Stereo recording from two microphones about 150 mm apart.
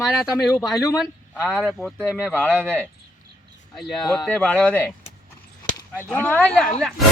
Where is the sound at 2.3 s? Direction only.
10° left (ahead or behind).